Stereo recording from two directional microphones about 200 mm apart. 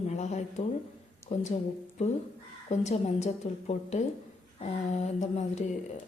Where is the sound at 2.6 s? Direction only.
35° left (ahead or behind).